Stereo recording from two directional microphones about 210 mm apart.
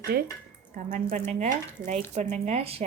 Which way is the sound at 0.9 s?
40° right (ahead or behind).